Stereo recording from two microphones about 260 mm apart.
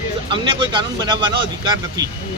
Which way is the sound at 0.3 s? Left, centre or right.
Centre.